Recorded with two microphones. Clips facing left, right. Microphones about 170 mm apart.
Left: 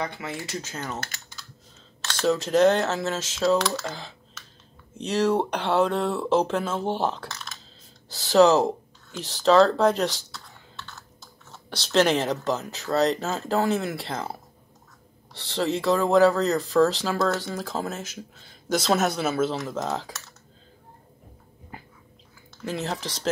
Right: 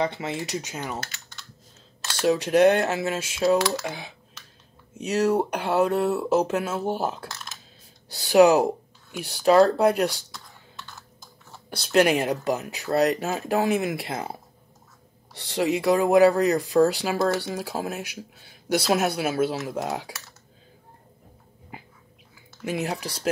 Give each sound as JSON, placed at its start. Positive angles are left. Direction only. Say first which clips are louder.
{"t": 0.0, "sound": "speech", "louder": "right 5 dB", "side_deg": -20}
{"t": 2.0, "sound": "speech", "louder": "right 1 dB", "side_deg": -10}
{"t": 11.5, "sound": "speech", "louder": "right 2 dB", "side_deg": -10}
{"t": 15.3, "sound": "speech", "louder": "right 2 dB", "side_deg": -15}
{"t": 22.6, "sound": "speech", "louder": "right 2 dB", "side_deg": -15}